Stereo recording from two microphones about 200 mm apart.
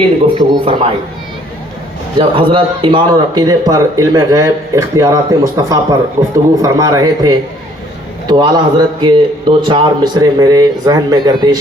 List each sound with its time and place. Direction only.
0.3 s a man's voice: 25° right (ahead or behind)
2.1 s a man's voice: 25° right (ahead or behind)